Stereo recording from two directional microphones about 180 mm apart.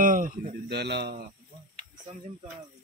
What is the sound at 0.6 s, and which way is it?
Speech, 65° right (ahead or behind).